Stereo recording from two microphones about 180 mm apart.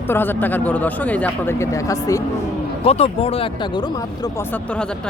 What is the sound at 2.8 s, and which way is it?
Speech, 35° left (ahead or behind).